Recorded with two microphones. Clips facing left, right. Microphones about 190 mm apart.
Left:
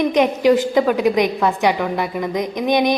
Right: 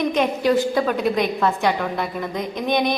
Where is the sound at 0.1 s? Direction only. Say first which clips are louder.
Left 4 dB; 15° left (ahead or behind).